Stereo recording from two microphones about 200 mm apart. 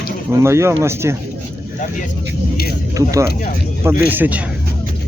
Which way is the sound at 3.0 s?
15° right (ahead or behind).